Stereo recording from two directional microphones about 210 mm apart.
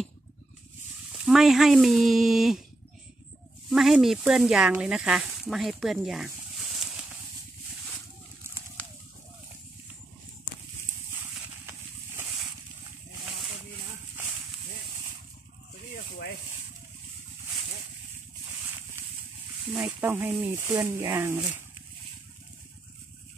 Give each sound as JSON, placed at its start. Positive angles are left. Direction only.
{"t": 1.1, "sound": "speech", "side_deg": 0}
{"t": 3.7, "sound": "speech", "side_deg": 0}
{"t": 19.8, "sound": "speech", "side_deg": -10}